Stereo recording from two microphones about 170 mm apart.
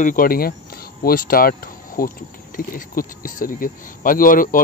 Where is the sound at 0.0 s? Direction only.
55° left (ahead or behind).